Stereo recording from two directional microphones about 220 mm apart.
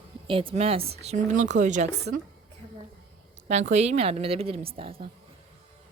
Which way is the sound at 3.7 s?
30° right (ahead or behind).